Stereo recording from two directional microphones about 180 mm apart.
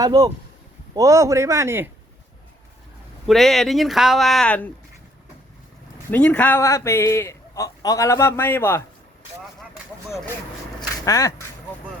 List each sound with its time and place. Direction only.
0.0 s a man's voice: 20° right (ahead or behind)
3.2 s speech: centre (ahead or behind)
6.1 s a man's voice: 10° left (ahead or behind)
10.8 s speech: 20° left (ahead or behind)